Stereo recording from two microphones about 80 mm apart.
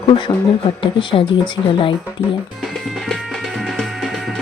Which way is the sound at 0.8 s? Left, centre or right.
Left.